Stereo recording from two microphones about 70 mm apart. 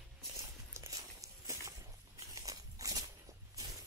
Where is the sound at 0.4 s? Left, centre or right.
Right.